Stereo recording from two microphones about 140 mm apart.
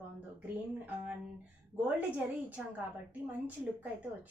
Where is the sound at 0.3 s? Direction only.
10° right (ahead or behind).